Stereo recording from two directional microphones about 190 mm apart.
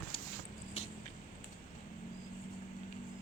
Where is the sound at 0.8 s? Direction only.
30° left (ahead or behind).